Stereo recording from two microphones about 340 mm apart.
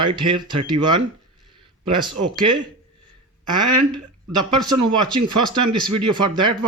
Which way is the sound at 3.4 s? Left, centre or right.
Right.